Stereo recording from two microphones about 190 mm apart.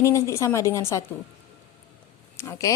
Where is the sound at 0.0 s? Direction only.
15° left (ahead or behind).